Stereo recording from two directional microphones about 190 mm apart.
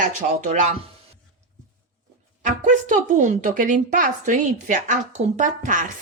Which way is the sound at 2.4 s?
40° right (ahead or behind).